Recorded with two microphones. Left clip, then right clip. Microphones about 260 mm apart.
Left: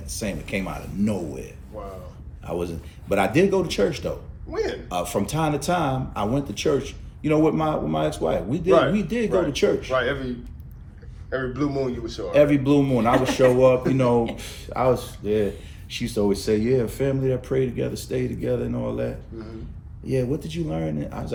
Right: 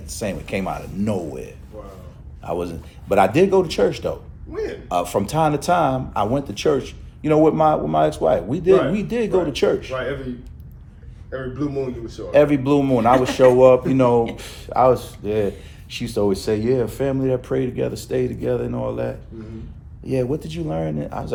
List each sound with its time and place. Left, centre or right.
0.0 s speech: centre
9.9 s a man's voice: left
12.3 s speech: centre